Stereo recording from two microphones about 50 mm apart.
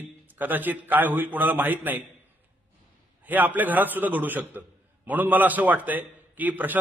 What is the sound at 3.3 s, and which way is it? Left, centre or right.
A man's voice, right.